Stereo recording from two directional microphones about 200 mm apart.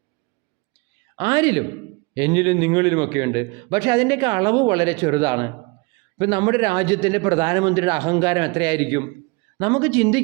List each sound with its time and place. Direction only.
1.2 s a man's voice: 20° right (ahead or behind)